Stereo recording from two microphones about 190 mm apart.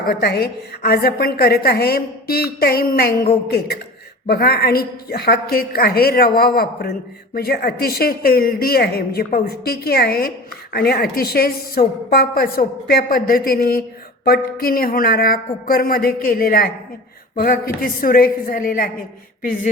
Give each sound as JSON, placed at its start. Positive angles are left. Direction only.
{"t": 0.0, "sound": "a woman's voice", "side_deg": 55}
{"t": 4.3, "sound": "speech", "side_deg": 55}